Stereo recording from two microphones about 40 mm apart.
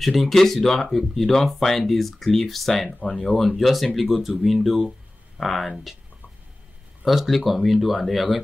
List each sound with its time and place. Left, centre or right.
0.0 s speech: centre
3.0 s speech: left
3.3 s speech: centre
7.1 s speech: centre